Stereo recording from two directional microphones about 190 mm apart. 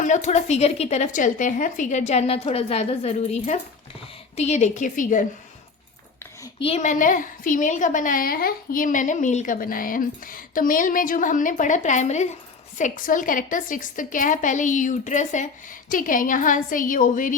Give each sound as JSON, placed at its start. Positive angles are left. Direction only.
{"t": 0.0, "sound": "a woman's voice", "side_deg": 40}
{"t": 6.6, "sound": "a woman's voice", "side_deg": 35}